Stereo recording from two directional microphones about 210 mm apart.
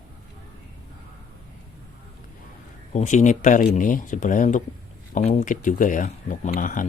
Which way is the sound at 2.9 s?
35° left (ahead or behind).